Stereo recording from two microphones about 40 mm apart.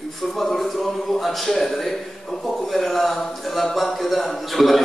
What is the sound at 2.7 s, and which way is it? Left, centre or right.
Speech, centre.